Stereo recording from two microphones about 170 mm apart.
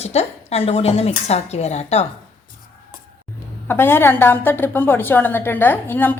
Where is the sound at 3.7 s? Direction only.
15° left (ahead or behind).